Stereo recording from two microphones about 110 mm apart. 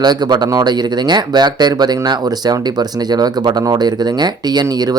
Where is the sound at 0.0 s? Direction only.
40° right (ahead or behind).